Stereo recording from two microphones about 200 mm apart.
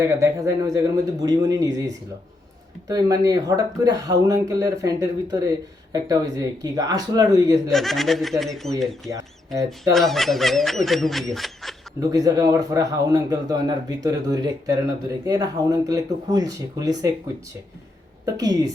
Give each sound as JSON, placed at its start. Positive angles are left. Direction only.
{"t": 0.0, "sound": "speech", "side_deg": -15}
{"t": 7.7, "sound": "speech", "side_deg": 0}
{"t": 9.0, "sound": "speech", "side_deg": -15}
{"t": 9.9, "sound": "speech", "side_deg": 0}
{"t": 11.9, "sound": "speech", "side_deg": -20}
{"t": 18.3, "sound": "a woman's voice", "side_deg": -20}